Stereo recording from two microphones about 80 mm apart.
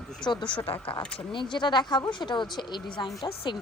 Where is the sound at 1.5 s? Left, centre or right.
Left.